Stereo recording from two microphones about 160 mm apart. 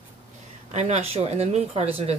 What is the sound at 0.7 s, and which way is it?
Speech, 45° right (ahead or behind).